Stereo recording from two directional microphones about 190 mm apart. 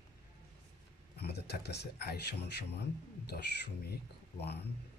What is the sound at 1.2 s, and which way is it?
Speech, 60° left (ahead or behind).